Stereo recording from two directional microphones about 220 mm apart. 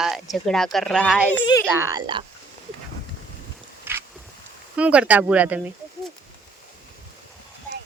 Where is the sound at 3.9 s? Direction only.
10° right (ahead or behind).